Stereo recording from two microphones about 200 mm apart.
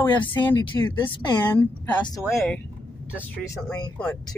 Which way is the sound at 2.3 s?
5° left (ahead or behind).